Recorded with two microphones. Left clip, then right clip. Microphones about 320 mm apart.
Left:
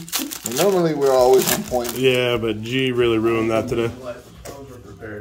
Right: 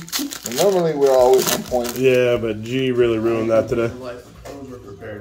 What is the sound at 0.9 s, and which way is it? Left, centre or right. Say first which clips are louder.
Speech: right 1 dB; left.